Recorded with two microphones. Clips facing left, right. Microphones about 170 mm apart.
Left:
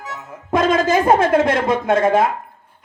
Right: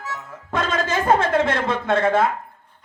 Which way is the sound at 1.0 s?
15° left (ahead or behind).